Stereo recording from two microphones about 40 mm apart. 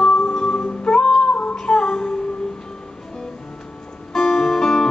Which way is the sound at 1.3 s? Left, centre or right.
Left.